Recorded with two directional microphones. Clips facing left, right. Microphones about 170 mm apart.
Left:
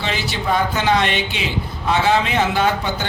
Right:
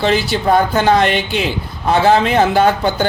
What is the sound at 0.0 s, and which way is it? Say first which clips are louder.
A man's voice: right 8 dB; 45° right (ahead or behind).